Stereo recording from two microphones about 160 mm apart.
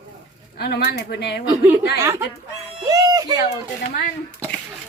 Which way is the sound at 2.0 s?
15° right (ahead or behind).